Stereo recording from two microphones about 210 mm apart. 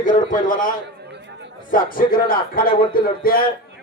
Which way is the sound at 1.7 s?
40° left (ahead or behind).